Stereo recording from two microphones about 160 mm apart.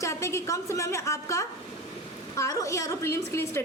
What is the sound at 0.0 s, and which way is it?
A woman's voice, 20° left (ahead or behind).